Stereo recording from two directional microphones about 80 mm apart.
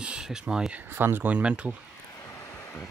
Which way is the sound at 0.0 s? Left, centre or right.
Centre.